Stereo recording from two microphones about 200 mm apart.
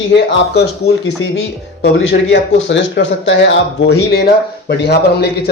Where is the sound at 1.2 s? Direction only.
75° left (ahead or behind).